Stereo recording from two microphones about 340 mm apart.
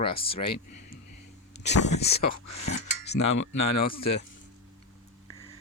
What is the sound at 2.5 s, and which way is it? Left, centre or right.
Cutlery, left.